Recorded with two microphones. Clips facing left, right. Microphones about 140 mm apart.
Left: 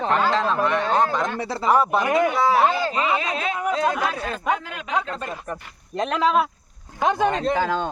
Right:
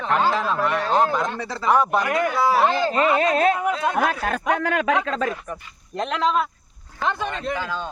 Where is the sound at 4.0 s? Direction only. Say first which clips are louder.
Right 4 dB; 55° right (ahead or behind).